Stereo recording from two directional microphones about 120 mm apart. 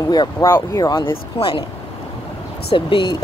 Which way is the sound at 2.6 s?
45° left (ahead or behind).